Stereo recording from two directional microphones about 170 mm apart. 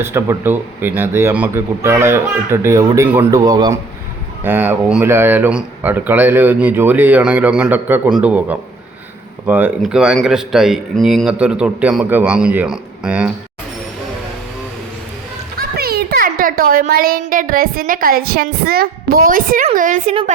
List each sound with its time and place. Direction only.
0.0 s a man's voice: 15° right (ahead or behind)
15.7 s a child's voice: 65° right (ahead or behind)